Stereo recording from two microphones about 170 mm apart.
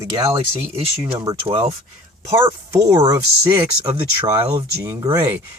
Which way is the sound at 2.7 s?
20° right (ahead or behind).